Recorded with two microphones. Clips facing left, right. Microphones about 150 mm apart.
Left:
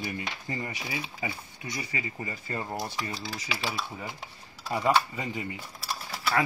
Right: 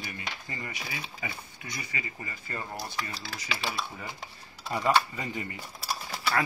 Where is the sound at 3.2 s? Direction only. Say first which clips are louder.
Left 1 dB; centre (ahead or behind).